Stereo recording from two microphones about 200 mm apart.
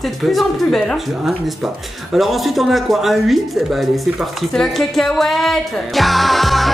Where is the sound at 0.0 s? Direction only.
Centre (ahead or behind).